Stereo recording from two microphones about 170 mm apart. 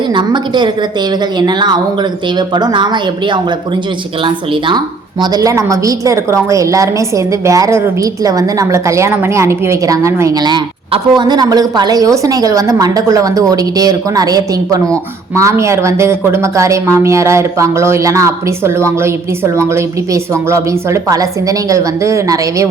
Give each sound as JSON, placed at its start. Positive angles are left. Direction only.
{"t": 0.1, "sound": "a woman's voice", "side_deg": -25}
{"t": 5.2, "sound": "a woman's voice", "side_deg": -20}
{"t": 20.5, "sound": "a woman's voice", "side_deg": -20}